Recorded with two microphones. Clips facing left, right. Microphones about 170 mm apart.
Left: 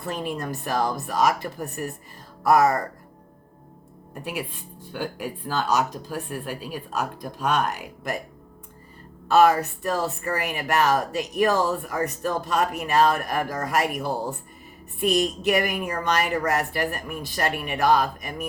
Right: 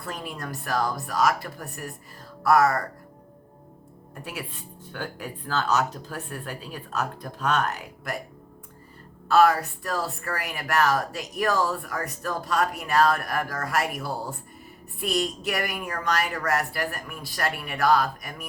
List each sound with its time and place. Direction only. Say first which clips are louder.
0.0 s a woman's voice: left 6 dB; 20° left (ahead or behind)
4.1 s speech: left 5 dB; 15° left (ahead or behind)
9.3 s a woman's voice: left 2 dB; 20° left (ahead or behind)